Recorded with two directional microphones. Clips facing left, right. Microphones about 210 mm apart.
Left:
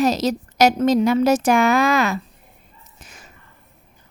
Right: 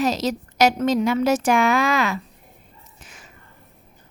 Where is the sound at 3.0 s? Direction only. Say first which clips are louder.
Left 2 dB; 40° left (ahead or behind).